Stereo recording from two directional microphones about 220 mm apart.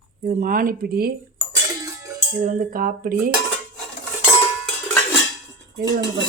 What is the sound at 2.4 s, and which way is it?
Speech, 35° right (ahead or behind).